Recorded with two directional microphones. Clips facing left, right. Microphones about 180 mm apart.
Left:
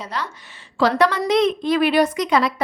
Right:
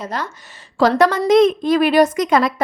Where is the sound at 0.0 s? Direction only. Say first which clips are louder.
Right 3 dB; 45° right (ahead or behind).